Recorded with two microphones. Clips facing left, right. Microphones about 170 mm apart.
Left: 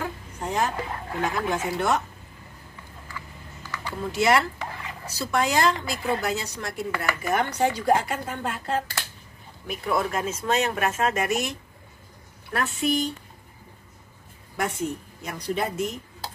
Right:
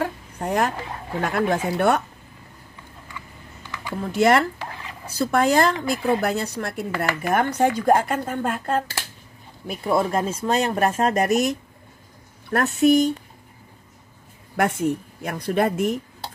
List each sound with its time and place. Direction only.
0.0 s a sound: 60° right (ahead or behind)
1.3 s a woman's voice: 65° right (ahead or behind)
4.1 s speech: 55° right (ahead or behind)
9.7 s speech: 30° right (ahead or behind)
12.5 s speech: 45° right (ahead or behind)
14.6 s a woman's voice: 60° right (ahead or behind)